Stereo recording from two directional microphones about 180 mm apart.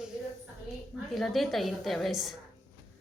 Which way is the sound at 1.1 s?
Centre (ahead or behind).